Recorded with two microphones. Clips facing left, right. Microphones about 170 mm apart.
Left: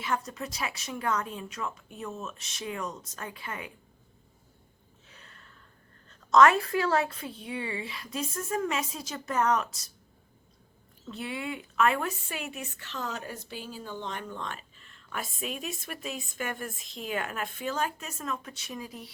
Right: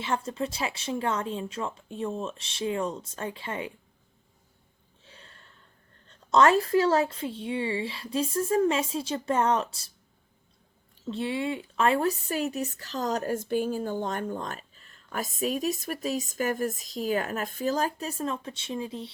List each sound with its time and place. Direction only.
0.0 s a woman's voice: 30° right (ahead or behind)
5.0 s gasp: 30° right (ahead or behind)
6.1 s a woman's voice: 30° right (ahead or behind)
11.1 s a woman's voice: 30° right (ahead or behind)